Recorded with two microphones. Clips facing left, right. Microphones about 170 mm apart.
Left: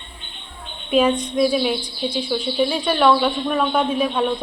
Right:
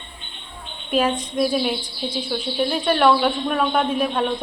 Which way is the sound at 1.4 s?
Centre (ahead or behind).